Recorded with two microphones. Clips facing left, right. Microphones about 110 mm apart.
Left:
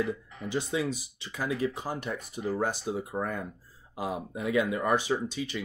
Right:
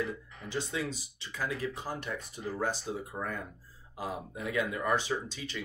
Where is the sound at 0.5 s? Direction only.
15° left (ahead or behind).